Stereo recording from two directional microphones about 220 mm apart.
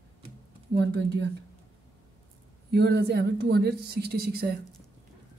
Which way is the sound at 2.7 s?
50° right (ahead or behind).